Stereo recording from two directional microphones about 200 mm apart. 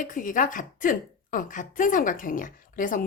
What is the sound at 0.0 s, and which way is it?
A woman's voice, 40° left (ahead or behind).